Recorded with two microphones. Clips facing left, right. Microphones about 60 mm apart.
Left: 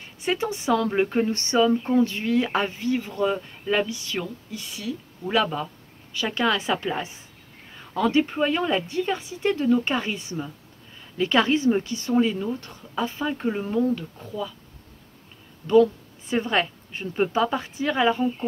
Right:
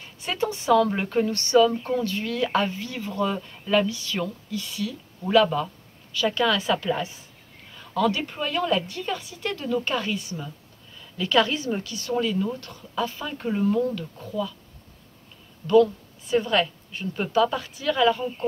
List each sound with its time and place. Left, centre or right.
0.2 s a woman's voice: centre
15.6 s a woman's voice: left